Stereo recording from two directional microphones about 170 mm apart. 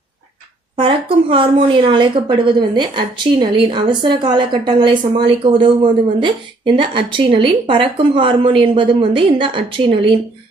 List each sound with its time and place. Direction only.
0.7 s a woman's voice: 30° right (ahead or behind)